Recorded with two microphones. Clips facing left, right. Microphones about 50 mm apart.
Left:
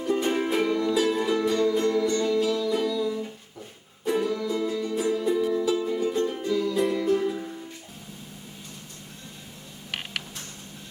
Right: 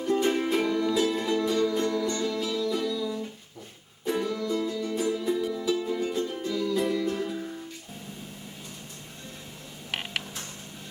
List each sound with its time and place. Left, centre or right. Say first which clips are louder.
0.0 s music: even; centre
1.8 s music: left 4 dB; centre
2.0 s music: left 5 dB; centre
2.7 s music: left 3 dB; centre
9.9 s a sound: right 1 dB; centre